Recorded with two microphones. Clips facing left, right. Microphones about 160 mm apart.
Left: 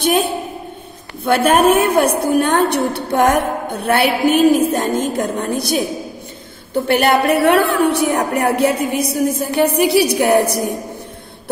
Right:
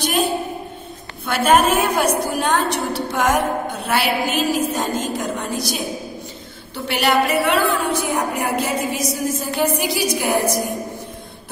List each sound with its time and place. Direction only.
1.2 s a woman's voice: 55° left (ahead or behind)